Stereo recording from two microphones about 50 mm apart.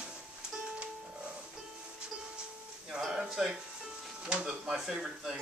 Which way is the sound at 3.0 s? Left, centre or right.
Centre.